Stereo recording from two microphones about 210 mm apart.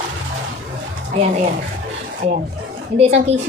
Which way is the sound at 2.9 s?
30° right (ahead or behind).